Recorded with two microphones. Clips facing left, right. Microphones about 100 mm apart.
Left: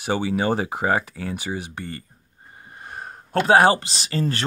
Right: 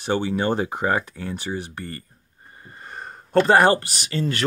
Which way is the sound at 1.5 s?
20° left (ahead or behind).